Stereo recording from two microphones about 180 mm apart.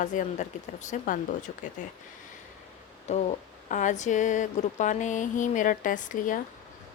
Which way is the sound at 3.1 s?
40° left (ahead or behind).